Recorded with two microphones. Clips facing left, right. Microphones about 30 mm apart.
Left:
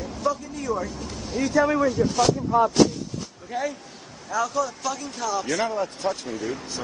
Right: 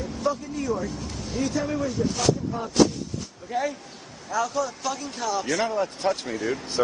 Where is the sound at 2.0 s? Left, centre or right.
Left.